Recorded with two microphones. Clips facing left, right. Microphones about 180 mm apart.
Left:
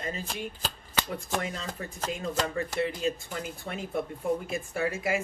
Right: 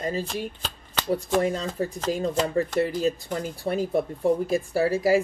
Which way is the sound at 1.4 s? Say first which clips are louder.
Right 10 dB; 35° right (ahead or behind).